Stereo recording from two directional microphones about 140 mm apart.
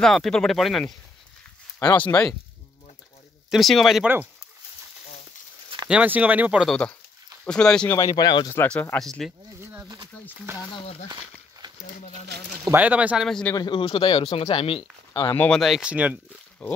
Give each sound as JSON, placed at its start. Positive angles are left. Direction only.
{"t": 0.0, "sound": "speech", "side_deg": 5}
{"t": 2.0, "sound": "speech", "side_deg": 10}
{"t": 3.4, "sound": "speech", "side_deg": 0}
{"t": 5.9, "sound": "speech", "side_deg": -10}
{"t": 6.7, "sound": "speech", "side_deg": 10}
{"t": 8.2, "sound": "speech", "side_deg": 35}
{"t": 8.5, "sound": "speech", "side_deg": 10}
{"t": 9.6, "sound": "a sound", "side_deg": -15}
{"t": 12.6, "sound": "speech", "side_deg": -10}
{"t": 13.3, "sound": "speech", "side_deg": 5}
{"t": 13.6, "sound": "speech", "side_deg": 35}
{"t": 15.3, "sound": "speech", "side_deg": 10}
{"t": 15.6, "sound": "speech", "side_deg": -5}